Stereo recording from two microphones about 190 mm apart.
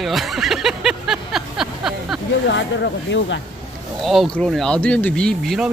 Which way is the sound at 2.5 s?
70° left (ahead or behind).